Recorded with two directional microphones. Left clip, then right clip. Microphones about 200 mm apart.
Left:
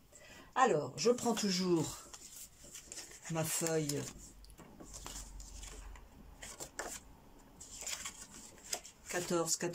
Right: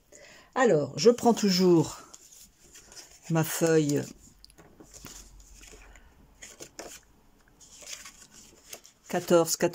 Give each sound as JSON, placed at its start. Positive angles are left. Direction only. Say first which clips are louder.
{"t": 0.5, "sound": "speech", "louder": "right 7 dB", "side_deg": -45}
{"t": 3.3, "sound": "speech", "louder": "right 12 dB", "side_deg": -45}
{"t": 6.4, "sound": "a sound", "louder": "right 1 dB", "side_deg": 0}
{"t": 9.0, "sound": "speech", "louder": "right 13 dB", "side_deg": -40}